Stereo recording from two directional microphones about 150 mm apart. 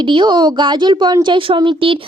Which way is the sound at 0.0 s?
30° right (ahead or behind).